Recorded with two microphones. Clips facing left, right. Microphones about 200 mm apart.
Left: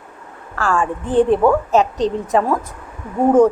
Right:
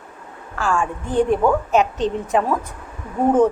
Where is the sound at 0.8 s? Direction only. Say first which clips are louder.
Left 6 dB; 30° left (ahead or behind).